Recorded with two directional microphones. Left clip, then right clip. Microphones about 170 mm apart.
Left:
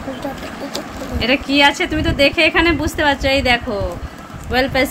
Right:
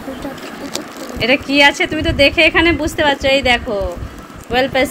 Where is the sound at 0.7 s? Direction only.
Centre (ahead or behind).